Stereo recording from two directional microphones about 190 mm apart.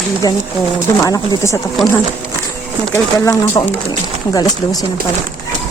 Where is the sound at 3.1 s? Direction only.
20° left (ahead or behind).